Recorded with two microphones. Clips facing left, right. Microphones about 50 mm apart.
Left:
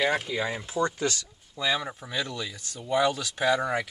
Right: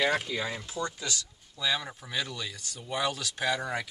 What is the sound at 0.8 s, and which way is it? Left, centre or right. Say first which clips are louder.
Speech: left 9 dB; left.